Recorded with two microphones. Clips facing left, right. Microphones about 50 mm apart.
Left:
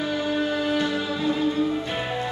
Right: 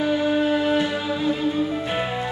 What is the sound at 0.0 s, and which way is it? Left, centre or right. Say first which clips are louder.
Music: right 4 dB; centre.